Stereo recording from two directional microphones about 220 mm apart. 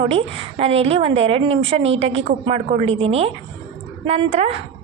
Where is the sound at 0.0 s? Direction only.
25° right (ahead or behind).